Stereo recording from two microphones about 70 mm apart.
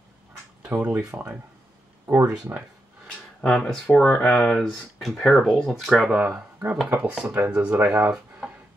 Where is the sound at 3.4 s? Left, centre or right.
Centre.